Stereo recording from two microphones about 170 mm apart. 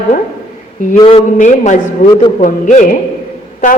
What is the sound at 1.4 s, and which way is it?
A woman's voice, 45° left (ahead or behind).